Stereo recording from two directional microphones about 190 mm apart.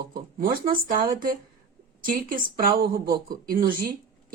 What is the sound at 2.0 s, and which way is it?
A woman's voice, 45° right (ahead or behind).